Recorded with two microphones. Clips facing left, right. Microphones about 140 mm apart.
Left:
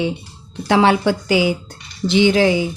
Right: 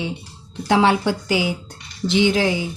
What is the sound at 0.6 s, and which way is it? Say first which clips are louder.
Speech: left 2 dB; 90° left.